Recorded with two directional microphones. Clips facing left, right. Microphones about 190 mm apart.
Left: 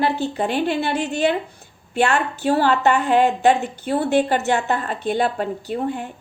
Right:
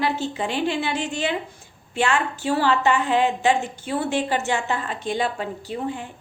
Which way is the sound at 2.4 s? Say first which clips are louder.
Left 4 dB; 55° left (ahead or behind).